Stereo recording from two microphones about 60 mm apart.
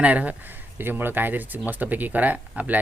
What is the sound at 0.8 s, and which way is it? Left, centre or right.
Speech, right.